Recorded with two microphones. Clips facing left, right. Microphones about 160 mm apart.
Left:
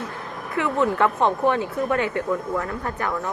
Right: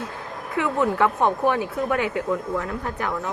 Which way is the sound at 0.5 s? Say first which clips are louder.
Even; centre (ahead or behind).